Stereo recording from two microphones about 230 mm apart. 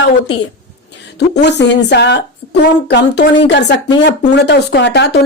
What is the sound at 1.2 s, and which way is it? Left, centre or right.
Speech, left.